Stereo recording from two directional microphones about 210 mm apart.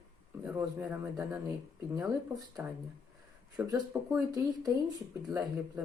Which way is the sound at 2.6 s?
10° right (ahead or behind).